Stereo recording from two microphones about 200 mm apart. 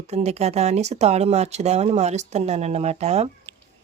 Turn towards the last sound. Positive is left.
turn(degrees=-35)  # may be behind; listen again after turning